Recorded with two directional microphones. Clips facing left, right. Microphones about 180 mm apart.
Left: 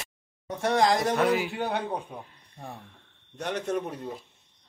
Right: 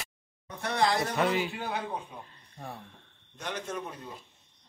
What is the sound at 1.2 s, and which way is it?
Speech, 5° left (ahead or behind).